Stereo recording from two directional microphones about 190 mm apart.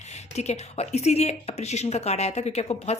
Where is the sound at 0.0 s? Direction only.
35° left (ahead or behind).